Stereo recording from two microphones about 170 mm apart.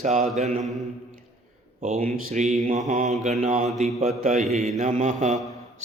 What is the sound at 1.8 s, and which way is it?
Speech, 40° right (ahead or behind).